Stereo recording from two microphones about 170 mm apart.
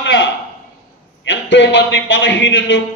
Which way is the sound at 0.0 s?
90° left.